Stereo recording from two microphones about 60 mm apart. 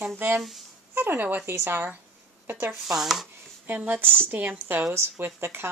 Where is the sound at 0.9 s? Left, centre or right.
Right.